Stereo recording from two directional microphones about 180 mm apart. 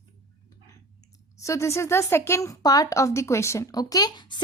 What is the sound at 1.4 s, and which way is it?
A woman's voice, 15° left (ahead or behind).